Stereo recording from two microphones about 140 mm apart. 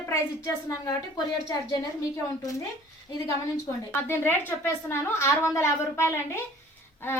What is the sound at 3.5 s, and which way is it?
A woman's voice, 15° left (ahead or behind).